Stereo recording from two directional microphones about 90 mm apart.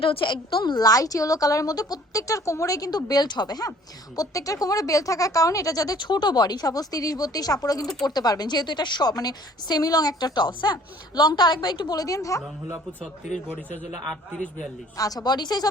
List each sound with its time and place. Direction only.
0.0 s a woman's voice: 80° left; by 12.4 s 40° left (ahead or behind)
14.0 s a man's voice: 5° left (ahead or behind)
14.9 s a woman's voice: 45° left (ahead or behind)